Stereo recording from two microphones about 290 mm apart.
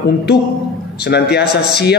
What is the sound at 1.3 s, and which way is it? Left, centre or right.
Speech, left.